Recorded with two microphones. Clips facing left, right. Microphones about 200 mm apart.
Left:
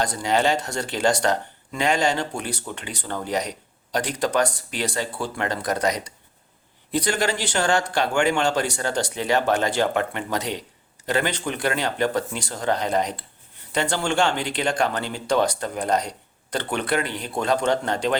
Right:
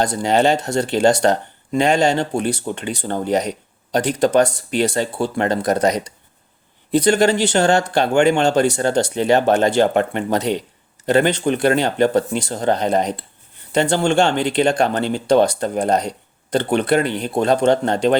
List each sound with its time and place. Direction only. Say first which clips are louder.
0.0 s speech: right 5 dB; 25° right (ahead or behind)